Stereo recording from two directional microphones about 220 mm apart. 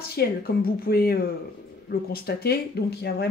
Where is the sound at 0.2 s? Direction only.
45° left (ahead or behind).